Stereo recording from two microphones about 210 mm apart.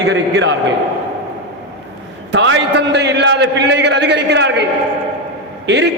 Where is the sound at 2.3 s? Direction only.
60° right (ahead or behind).